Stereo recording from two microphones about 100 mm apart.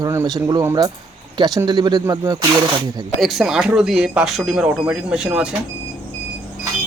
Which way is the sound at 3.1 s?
Centre (ahead or behind).